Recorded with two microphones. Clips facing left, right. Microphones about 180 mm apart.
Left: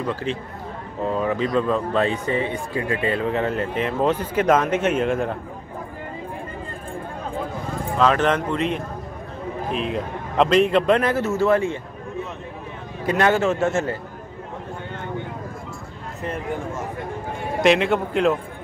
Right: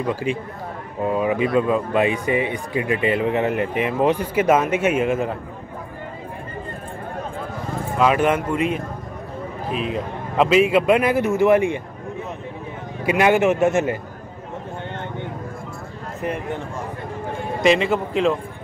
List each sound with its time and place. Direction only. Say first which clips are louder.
0.0 s speech: right 3 dB; 10° right (ahead or behind)
8.0 s speech: right 1 dB; 10° right (ahead or behind)
13.0 s speech: right 2 dB; 10° right (ahead or behind)
17.6 s speech: even; centre (ahead or behind)